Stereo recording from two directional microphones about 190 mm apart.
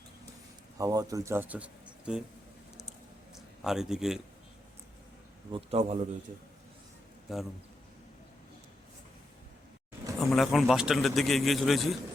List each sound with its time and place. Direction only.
0.8 s speech: 20° right (ahead or behind)
3.6 s a man's voice: centre (ahead or behind)
5.5 s a man's voice: 30° right (ahead or behind)
7.3 s a man's voice: centre (ahead or behind)
10.2 s a man's voice: centre (ahead or behind)